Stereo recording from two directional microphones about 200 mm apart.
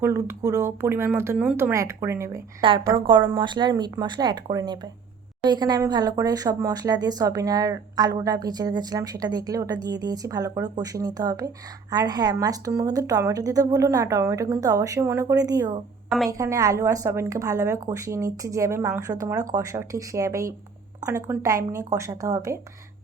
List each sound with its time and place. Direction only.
0.0 s a woman's voice: 15° right (ahead or behind)
2.6 s speech: 25° right (ahead or behind)
16.0 s a woman's voice: centre (ahead or behind)
16.4 s a woman's voice: 15° right (ahead or behind)